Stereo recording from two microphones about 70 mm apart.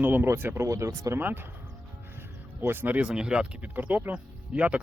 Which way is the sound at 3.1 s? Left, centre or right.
Centre.